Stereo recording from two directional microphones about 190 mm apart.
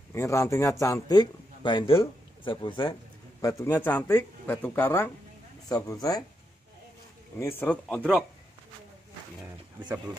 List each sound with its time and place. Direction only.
0.1 s a man's voice: 15° left (ahead or behind)
7.3 s a man's voice: 10° left (ahead or behind)